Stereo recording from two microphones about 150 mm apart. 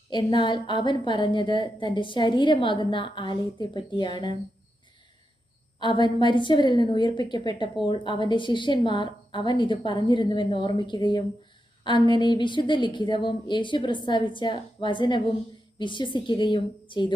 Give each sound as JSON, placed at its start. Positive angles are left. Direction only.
{"t": 0.1, "sound": "a woman's voice", "side_deg": 30}
{"t": 5.8, "sound": "a woman's voice", "side_deg": 30}